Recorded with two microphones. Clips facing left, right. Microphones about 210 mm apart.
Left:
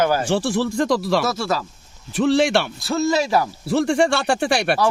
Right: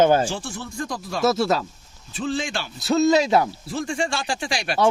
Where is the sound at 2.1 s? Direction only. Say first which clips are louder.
Left 10 dB; 75° left (ahead or behind).